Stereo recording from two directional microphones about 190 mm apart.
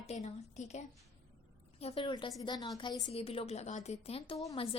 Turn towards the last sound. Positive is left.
turn(degrees=30)  # may be behind; listen again after turning